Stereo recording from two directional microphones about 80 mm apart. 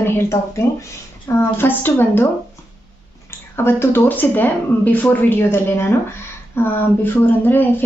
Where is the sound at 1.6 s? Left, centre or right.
Left.